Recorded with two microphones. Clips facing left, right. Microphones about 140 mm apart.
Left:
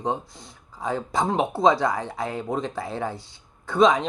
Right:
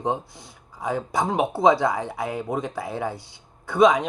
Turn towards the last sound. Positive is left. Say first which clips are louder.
# right 1 dB
turn(degrees=-10)  # may be behind; listen again after turning